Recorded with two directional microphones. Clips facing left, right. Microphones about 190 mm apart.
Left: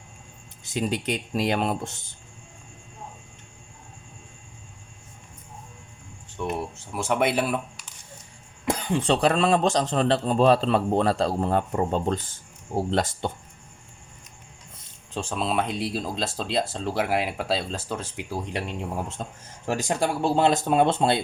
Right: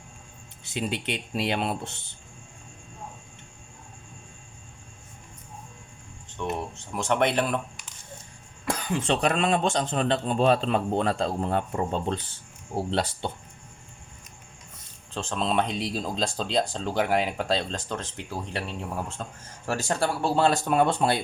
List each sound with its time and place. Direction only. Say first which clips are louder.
0.6 s speech: left 3 dB; 40° left (ahead or behind)
6.3 s speech: left 1 dB; 10° left (ahead or behind)
8.6 s speech: left 3 dB; 25° left (ahead or behind)
12.7 s speech: left 2 dB; 45° left (ahead or behind)
15.1 s speech: even; 10° left (ahead or behind)